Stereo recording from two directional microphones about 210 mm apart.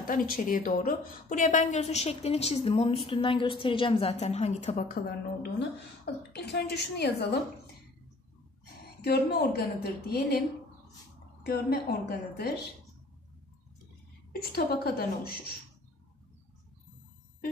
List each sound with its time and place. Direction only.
0.0 s a woman's voice: 40° left (ahead or behind)
6.0 s a woman's voice: 55° left (ahead or behind)
9.0 s a woman's voice: 50° left (ahead or behind)
11.4 s a woman's voice: 50° left (ahead or behind)
14.3 s a woman's voice: 45° left (ahead or behind)